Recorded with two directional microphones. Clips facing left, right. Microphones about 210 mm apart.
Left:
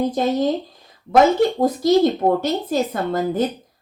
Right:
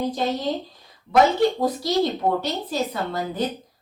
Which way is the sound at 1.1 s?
50° left (ahead or behind).